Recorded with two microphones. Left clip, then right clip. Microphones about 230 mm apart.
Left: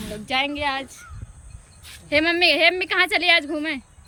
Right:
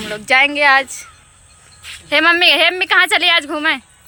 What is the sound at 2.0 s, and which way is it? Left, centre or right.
A woman's voice, centre.